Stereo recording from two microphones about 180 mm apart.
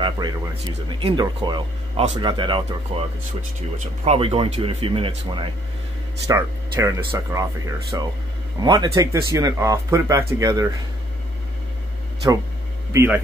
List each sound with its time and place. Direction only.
0.2 s speech: 20° right (ahead or behind)
6.2 s speech: 20° right (ahead or behind)
12.9 s speech: 10° right (ahead or behind)